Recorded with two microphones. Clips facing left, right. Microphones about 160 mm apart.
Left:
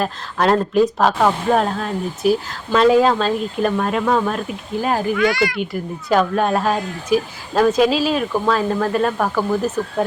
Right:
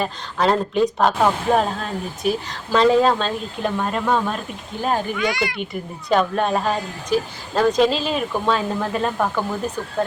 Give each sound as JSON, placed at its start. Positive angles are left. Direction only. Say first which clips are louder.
{"t": 0.0, "sound": "speech", "louder": "left 2 dB", "side_deg": 0}
{"t": 5.2, "sound": "speech", "louder": "left 5 dB", "side_deg": -20}
{"t": 5.5, "sound": "speech", "louder": "left 4 dB", "side_deg": 5}